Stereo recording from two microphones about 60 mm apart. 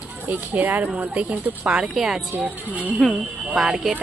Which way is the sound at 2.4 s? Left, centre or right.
Right.